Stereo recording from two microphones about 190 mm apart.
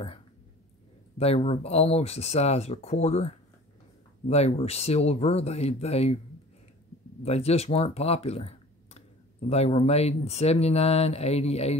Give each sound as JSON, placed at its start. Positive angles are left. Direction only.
{"t": 1.1, "sound": "speech", "side_deg": 30}
{"t": 7.2, "sound": "speech", "side_deg": 35}